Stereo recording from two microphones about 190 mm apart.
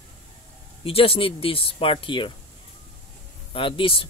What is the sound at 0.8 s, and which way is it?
Speech, 30° left (ahead or behind).